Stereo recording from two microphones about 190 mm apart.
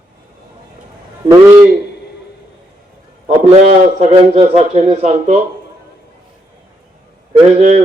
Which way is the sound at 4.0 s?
35° right (ahead or behind).